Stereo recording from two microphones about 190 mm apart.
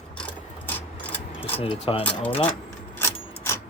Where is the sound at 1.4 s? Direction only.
30° left (ahead or behind).